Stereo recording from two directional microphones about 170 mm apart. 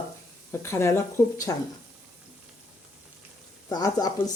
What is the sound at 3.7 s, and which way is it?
Speech, 20° left (ahead or behind).